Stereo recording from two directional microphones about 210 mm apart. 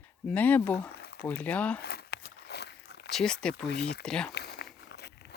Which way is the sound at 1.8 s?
50° left (ahead or behind).